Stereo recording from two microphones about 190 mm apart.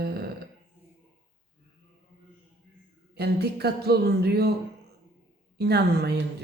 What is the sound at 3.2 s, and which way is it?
A woman's voice, 60° right (ahead or behind).